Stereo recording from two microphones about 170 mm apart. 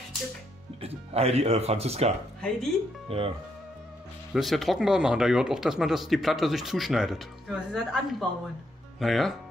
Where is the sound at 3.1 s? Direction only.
35° right (ahead or behind).